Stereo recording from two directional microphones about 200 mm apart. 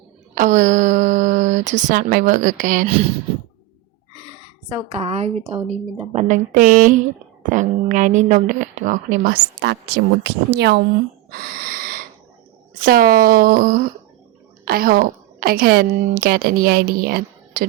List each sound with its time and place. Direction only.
0.3 s speech: 40° right (ahead or behind)
4.7 s a woman's voice: 30° right (ahead or behind); by 10.8 s 55° right (ahead or behind)
11.3 s snort: 45° right (ahead or behind)
12.8 s a woman's voice: 45° right (ahead or behind)